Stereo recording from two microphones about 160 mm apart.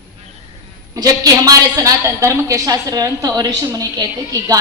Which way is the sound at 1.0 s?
25° right (ahead or behind).